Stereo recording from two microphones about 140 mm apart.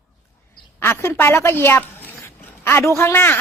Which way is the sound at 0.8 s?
15° left (ahead or behind).